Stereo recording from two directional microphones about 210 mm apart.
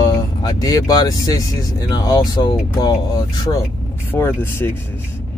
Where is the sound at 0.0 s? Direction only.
20° left (ahead or behind).